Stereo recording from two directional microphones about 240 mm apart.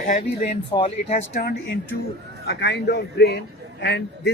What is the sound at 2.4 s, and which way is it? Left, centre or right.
A man's voice, left.